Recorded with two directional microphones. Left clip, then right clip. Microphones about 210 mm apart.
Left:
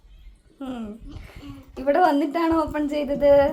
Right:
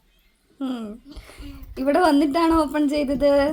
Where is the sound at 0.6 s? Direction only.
30° right (ahead or behind).